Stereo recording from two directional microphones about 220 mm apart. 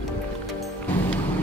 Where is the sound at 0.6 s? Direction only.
5° left (ahead or behind).